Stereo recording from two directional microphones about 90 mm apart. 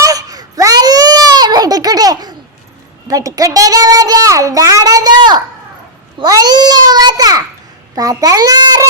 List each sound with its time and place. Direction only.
0.0 s baby cry: 40° right (ahead or behind)
3.1 s a child's voice: 40° right (ahead or behind)